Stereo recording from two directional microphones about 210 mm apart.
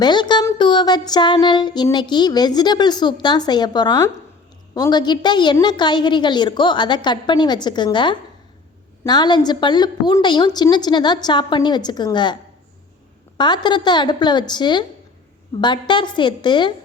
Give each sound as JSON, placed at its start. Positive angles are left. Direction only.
{"t": 0.0, "sound": "music", "side_deg": 20}